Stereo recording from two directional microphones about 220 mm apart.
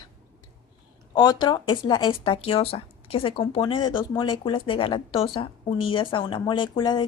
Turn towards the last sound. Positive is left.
turn(degrees=20)  # may be behind; listen again after turning